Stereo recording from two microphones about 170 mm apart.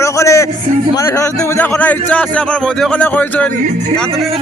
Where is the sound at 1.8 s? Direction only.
10° left (ahead or behind).